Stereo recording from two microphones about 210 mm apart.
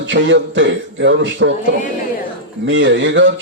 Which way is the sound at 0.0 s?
60° right (ahead or behind).